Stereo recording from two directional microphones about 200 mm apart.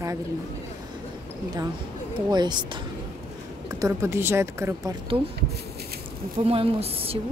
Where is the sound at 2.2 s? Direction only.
20° right (ahead or behind).